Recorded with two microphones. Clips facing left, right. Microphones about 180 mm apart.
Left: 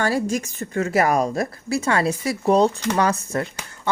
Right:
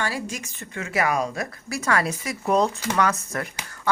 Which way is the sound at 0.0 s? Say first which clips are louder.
Left 7 dB; 45° left (ahead or behind).